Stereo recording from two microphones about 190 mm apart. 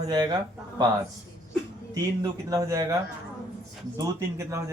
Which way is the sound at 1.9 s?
20° right (ahead or behind).